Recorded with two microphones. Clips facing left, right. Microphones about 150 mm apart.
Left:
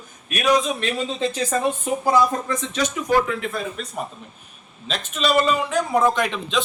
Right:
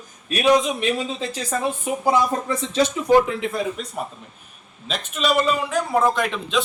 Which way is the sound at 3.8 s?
15° right (ahead or behind).